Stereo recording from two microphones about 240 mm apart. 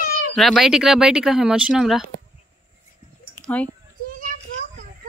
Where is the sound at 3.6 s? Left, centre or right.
Centre.